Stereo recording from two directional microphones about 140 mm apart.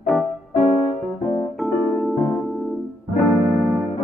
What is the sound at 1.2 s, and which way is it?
Piano, 45° left (ahead or behind).